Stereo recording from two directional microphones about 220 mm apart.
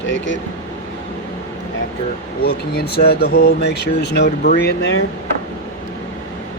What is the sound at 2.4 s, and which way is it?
Speech, 45° left (ahead or behind).